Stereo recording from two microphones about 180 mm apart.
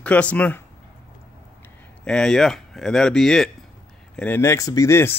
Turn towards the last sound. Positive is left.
turn(degrees=15)  # may be behind; listen again after turning